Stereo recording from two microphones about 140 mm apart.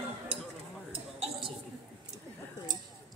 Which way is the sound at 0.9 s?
45° right (ahead or behind).